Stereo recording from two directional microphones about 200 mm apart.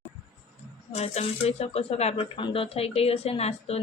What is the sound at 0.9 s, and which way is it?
Speech, 30° left (ahead or behind).